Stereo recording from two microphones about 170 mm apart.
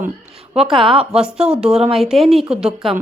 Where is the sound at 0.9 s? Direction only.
35° right (ahead or behind).